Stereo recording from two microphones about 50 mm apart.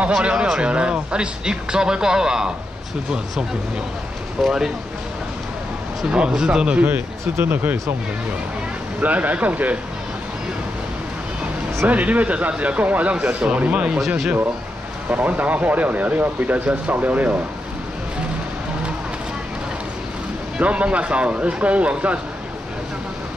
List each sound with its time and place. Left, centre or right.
0.2 s speech: right
4.4 s speech: centre
6.1 s speech: centre
7.4 s speech: right
9.0 s speech: right
11.9 s speech: right
13.1 s speech: centre
13.8 s speech: centre
15.0 s speech: right
20.5 s speech: right